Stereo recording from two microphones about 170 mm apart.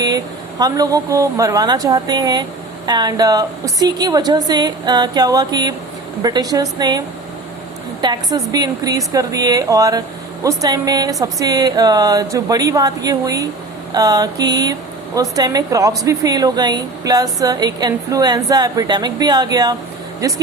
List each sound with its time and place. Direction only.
0.6 s speech: 20° right (ahead or behind)
8.0 s speech: 25° right (ahead or behind)